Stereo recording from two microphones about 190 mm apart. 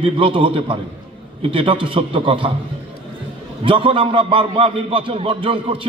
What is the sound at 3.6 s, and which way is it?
A man's voice, 25° right (ahead or behind).